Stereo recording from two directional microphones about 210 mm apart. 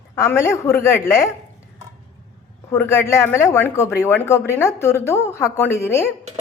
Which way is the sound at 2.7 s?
15° left (ahead or behind).